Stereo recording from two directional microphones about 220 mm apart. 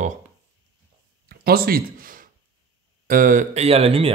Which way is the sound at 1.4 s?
45° right (ahead or behind).